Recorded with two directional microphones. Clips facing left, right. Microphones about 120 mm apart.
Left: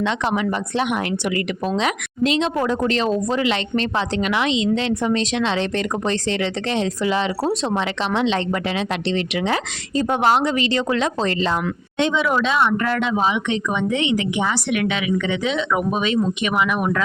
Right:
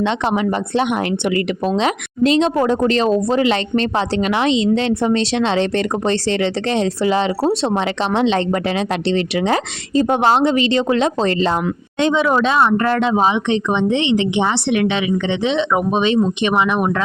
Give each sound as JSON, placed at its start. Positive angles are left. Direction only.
{"t": 0.0, "sound": "a woman's voice", "side_deg": -25}